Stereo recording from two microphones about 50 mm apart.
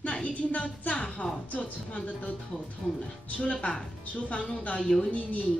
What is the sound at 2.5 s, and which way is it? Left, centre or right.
Speech, centre.